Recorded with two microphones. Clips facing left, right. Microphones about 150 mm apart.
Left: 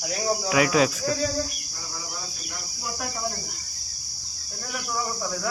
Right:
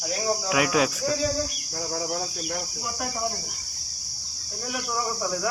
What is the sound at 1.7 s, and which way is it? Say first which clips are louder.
Cricket: right 12 dB; 60° right (ahead or behind).